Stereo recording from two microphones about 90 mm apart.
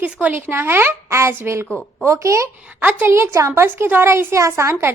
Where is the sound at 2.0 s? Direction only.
30° right (ahead or behind).